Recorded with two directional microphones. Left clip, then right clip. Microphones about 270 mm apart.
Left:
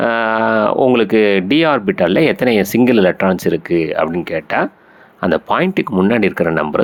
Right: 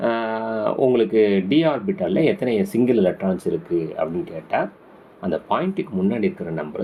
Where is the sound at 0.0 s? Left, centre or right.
Left.